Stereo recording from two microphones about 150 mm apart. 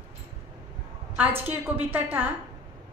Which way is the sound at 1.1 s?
10° right (ahead or behind).